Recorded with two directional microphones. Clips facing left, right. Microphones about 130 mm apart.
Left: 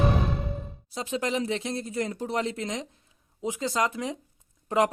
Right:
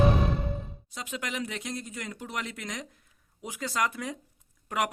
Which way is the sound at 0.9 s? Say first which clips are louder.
Left 7 dB; 30° left (ahead or behind).